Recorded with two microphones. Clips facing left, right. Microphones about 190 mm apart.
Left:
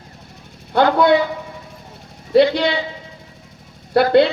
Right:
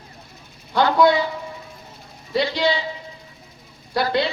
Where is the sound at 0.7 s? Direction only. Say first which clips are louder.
Left 2 dB; 55° left (ahead or behind).